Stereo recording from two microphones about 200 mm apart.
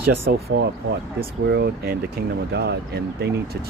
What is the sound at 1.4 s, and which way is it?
Speech, 55° right (ahead or behind).